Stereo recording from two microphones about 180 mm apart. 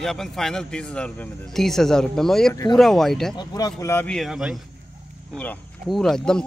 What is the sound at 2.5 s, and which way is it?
Speech, 20° left (ahead or behind).